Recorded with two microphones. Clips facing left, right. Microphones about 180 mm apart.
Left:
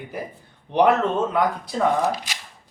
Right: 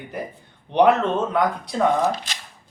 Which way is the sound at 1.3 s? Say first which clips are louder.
Right 1 dB; 5° left (ahead or behind).